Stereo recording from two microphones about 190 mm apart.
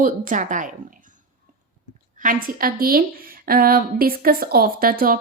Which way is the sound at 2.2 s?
45° right (ahead or behind).